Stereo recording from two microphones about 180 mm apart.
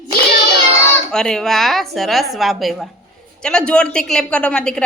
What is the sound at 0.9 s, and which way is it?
A child's voice, 5° left (ahead or behind).